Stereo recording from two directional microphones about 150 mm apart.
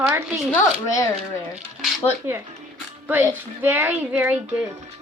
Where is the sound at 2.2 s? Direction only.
15° right (ahead or behind).